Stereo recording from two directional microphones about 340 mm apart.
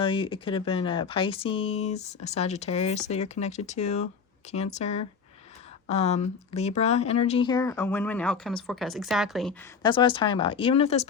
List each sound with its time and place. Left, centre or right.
0.0 s speech: centre
9.8 s speech: centre